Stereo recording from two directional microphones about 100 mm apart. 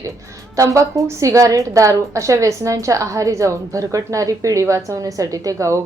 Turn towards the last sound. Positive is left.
turn(degrees=-30)  # may be behind; listen again after turning